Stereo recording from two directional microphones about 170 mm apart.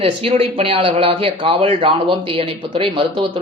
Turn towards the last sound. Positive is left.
turn(degrees=-30)  # may be behind; listen again after turning